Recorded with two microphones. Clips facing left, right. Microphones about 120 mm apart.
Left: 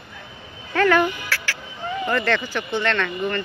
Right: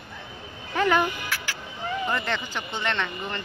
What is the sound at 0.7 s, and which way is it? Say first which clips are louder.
Speech: left 4 dB; 15° right (ahead or behind).